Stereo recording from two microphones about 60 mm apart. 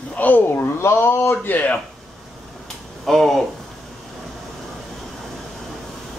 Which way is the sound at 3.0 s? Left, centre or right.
Centre.